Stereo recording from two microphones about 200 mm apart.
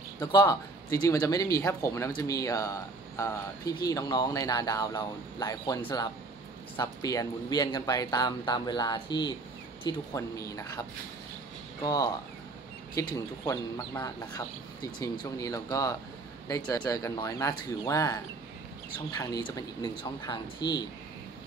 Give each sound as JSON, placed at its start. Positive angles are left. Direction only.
{"t": 0.2, "sound": "speech", "side_deg": 20}